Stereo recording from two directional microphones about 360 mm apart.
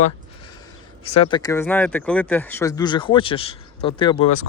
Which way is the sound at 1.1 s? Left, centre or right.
Centre.